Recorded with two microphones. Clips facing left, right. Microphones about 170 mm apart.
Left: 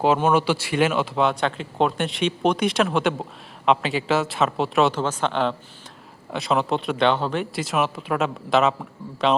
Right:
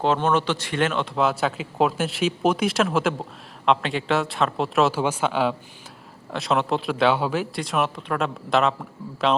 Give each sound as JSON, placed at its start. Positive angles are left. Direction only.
{"t": 0.0, "sound": "speech", "side_deg": 10}